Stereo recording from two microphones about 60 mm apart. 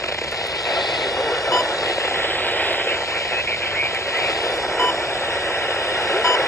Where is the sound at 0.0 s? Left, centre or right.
Left.